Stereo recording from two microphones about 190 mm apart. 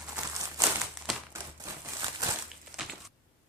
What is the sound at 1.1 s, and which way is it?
Crumpling, centre (ahead or behind).